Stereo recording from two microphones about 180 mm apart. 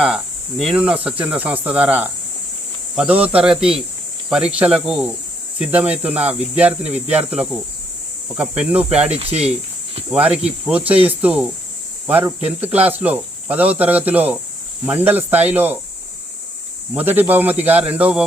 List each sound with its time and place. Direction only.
0.6 s cricket: 5° right (ahead or behind)
2.9 s speech: 5° right (ahead or behind)
5.5 s cricket: 5° right (ahead or behind)
16.9 s cricket: 10° right (ahead or behind)